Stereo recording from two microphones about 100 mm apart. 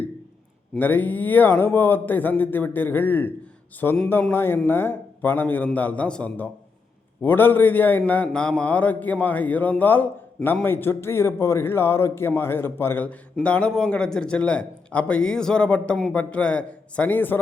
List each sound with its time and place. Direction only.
0.8 s a man's voice: 20° left (ahead or behind)